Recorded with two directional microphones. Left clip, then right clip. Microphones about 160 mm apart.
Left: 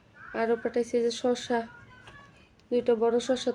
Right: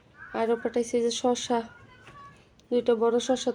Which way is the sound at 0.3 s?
15° right (ahead or behind).